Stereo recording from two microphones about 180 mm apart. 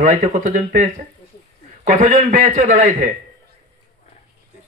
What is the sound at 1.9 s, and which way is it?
Speech, 45° right (ahead or behind).